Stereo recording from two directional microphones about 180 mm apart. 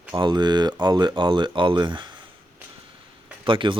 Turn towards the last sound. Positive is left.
turn(degrees=-30)  # may be behind; listen again after turning